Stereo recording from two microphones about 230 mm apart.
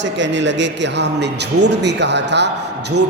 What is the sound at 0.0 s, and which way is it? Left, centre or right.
A man's voice, right.